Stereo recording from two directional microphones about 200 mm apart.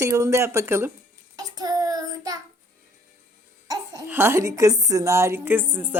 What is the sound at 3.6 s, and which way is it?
Speech, 15° right (ahead or behind).